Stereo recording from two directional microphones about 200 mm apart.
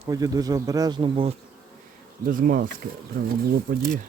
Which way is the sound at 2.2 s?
45° right (ahead or behind).